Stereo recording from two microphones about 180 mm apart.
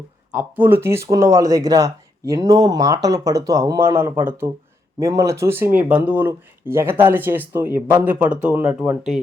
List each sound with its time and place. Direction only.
0.3 s speech: 10° right (ahead or behind)